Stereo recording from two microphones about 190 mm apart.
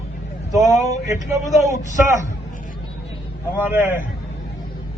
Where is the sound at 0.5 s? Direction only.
15° right (ahead or behind).